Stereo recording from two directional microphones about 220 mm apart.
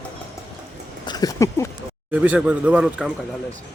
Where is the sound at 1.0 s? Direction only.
20° left (ahead or behind).